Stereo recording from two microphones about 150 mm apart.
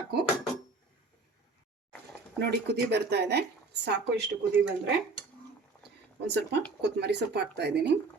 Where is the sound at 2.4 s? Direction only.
90° right.